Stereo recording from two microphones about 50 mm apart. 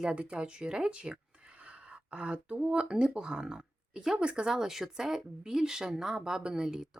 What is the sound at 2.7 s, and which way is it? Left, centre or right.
Speech, centre.